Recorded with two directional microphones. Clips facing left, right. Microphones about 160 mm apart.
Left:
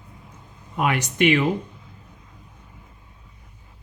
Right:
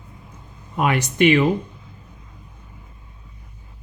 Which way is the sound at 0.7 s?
35° right (ahead or behind).